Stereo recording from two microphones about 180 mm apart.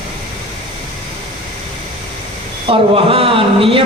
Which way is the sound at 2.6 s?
30° right (ahead or behind).